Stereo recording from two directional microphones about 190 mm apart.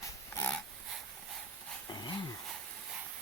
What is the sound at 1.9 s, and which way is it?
Dog, 20° left (ahead or behind).